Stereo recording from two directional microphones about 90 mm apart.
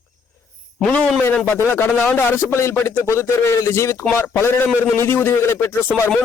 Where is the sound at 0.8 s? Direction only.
15° left (ahead or behind).